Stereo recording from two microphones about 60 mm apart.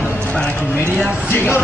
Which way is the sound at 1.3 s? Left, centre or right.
Left.